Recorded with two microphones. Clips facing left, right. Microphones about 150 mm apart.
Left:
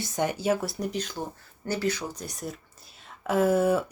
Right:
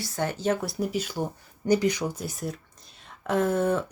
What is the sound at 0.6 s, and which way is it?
Speech, centre (ahead or behind).